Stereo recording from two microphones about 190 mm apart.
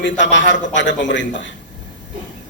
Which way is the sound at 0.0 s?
70° left (ahead or behind).